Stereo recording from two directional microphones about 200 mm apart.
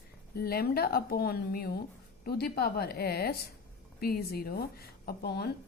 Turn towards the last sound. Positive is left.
turn(degrees=50)  # may be behind; listen again after turning